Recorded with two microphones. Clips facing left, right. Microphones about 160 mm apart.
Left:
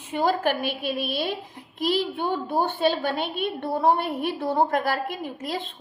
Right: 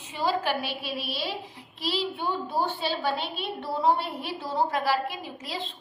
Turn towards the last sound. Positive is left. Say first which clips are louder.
# left 5 dB
turn(degrees=50)  # may be behind; listen again after turning